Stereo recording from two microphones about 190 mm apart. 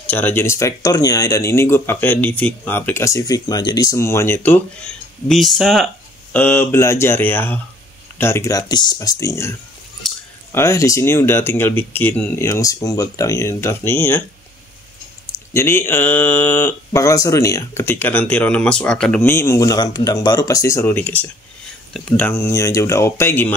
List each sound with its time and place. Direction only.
0.0 s speech: 10° left (ahead or behind)
15.3 s speech: 15° left (ahead or behind)